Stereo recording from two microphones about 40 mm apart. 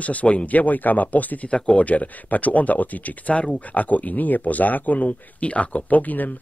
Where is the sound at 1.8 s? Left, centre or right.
Left.